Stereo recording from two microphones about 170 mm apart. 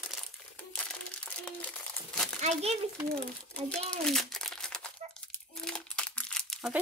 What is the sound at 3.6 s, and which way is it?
Speech, 5° left (ahead or behind).